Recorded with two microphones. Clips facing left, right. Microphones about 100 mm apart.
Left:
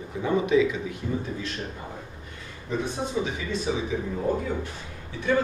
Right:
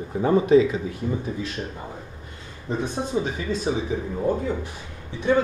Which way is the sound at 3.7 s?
35° right (ahead or behind).